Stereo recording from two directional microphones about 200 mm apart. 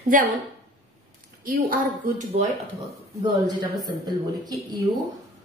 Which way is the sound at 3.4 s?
20° right (ahead or behind).